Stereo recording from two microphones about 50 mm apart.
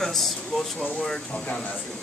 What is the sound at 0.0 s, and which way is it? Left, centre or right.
Air conditioning, centre.